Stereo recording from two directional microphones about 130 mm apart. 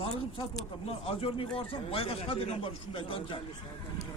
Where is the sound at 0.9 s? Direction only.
45° left (ahead or behind).